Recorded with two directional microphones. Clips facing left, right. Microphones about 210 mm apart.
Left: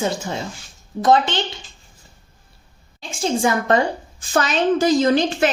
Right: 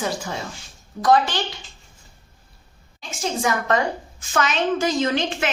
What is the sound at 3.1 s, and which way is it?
A woman's voice, 30° left (ahead or behind).